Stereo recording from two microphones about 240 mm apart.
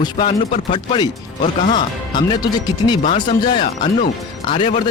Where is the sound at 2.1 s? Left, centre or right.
Centre.